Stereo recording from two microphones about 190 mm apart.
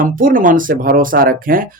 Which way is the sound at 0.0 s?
45° right (ahead or behind).